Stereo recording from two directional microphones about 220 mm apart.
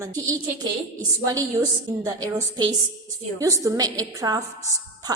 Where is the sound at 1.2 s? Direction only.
15° right (ahead or behind).